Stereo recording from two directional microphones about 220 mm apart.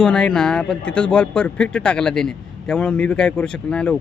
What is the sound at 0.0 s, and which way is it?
Speech, 5° left (ahead or behind).